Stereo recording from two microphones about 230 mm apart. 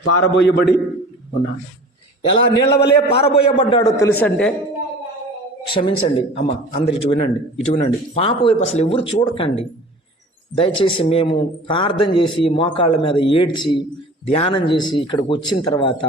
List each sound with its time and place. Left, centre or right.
0.0 s a man's voice: left
2.3 s a man's voice: left
3.3 s a man's voice: left; by 4.5 s centre
5.6 s a man's voice: left